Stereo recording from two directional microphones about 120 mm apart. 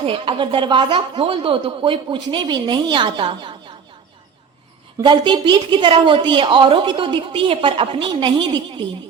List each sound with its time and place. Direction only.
0.0 s speech: 50° right (ahead or behind)
4.9 s speech: 40° right (ahead or behind)